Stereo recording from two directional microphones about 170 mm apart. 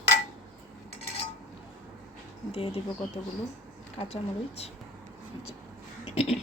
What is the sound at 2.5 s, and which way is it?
Speech, 35° left (ahead or behind).